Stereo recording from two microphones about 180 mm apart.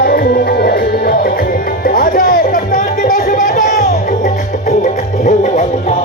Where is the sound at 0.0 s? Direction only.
60° left (ahead or behind).